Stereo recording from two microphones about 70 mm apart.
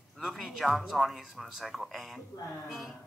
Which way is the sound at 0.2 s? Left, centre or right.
Centre.